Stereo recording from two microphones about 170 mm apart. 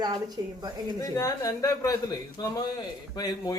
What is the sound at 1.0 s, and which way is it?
Speech, 20° left (ahead or behind).